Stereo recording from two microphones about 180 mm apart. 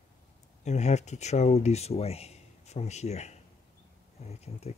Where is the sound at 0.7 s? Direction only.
40° left (ahead or behind).